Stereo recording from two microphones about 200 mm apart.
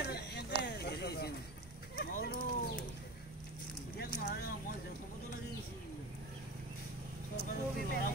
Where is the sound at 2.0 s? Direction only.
40° left (ahead or behind).